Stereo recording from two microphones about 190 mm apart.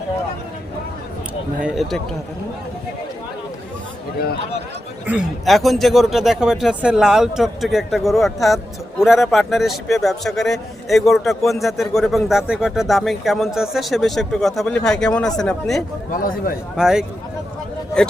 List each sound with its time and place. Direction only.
1.6 s speech: centre (ahead or behind)
5.0 s speech: centre (ahead or behind)
16.1 s a man's voice: 45° left (ahead or behind)
16.7 s speech: 5° right (ahead or behind)